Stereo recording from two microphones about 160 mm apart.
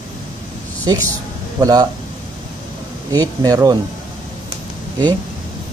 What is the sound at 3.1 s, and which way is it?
Speech, 20° right (ahead or behind).